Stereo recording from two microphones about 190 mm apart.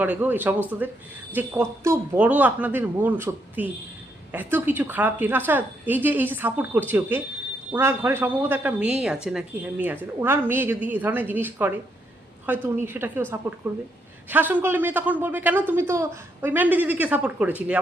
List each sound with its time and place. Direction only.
0.0 s speech: 10° right (ahead or behind)